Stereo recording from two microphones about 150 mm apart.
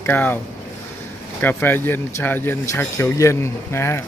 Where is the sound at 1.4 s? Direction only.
15° left (ahead or behind).